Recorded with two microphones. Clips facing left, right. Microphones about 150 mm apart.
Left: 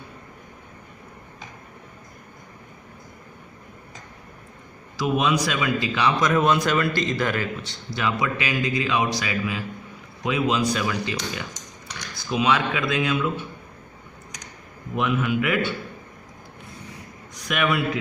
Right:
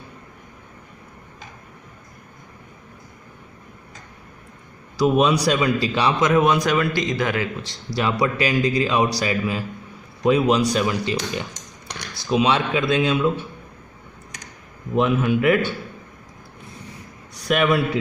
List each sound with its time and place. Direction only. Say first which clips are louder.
4.9 s a man's voice: right 5 dB; 40° right (ahead or behind); by 7.4 s 15° right (ahead or behind)
7.6 s a man's voice: right 3 dB; 35° right (ahead or behind)
14.9 s a man's voice: right 4 dB; 30° right (ahead or behind)
17.3 s a sound: right 5 dB; 35° right (ahead or behind)